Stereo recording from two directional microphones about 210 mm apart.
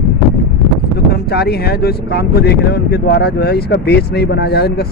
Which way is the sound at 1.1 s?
50° left (ahead or behind).